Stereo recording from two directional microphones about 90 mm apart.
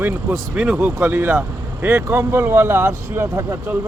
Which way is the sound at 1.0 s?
25° right (ahead or behind).